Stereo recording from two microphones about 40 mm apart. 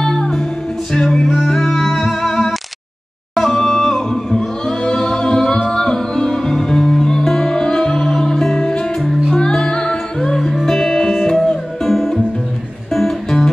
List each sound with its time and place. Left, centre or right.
0.0 s music: centre
2.0 s music: centre